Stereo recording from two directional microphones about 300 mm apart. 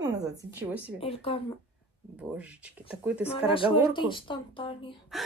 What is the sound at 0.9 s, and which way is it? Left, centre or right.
Speech, centre.